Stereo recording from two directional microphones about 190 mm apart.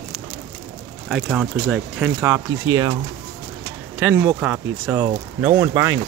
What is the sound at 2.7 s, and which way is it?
Speech, 20° right (ahead or behind).